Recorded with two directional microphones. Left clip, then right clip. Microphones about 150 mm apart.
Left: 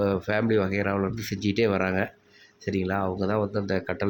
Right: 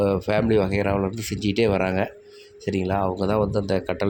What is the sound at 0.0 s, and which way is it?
Speech, 25° right (ahead or behind).